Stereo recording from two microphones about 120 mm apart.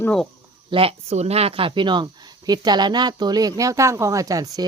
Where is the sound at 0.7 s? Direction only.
50° right (ahead or behind).